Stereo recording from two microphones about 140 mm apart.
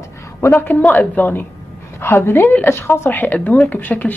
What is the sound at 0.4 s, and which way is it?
Speech, 15° left (ahead or behind).